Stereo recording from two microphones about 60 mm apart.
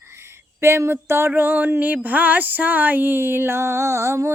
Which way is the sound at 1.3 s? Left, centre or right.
Right.